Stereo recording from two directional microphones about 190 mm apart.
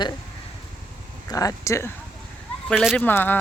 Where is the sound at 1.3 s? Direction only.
20° left (ahead or behind).